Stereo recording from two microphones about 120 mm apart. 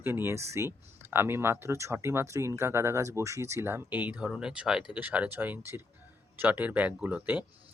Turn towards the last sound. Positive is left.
turn(degrees=-10)  # may be behind; listen again after turning